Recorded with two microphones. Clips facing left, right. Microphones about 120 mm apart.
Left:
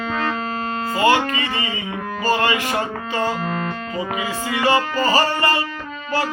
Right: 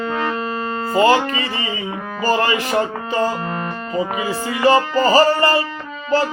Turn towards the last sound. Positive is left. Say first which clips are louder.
# right 5 dB
turn(degrees=-35)  # may be behind; listen again after turning